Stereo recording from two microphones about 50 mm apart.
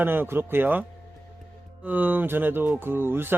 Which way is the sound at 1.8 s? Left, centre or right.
Right.